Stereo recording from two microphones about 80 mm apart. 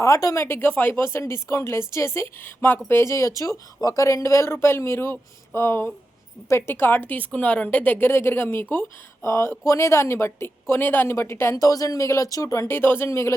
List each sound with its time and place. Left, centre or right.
0.0 s a woman's voice: left
11.5 s speech: left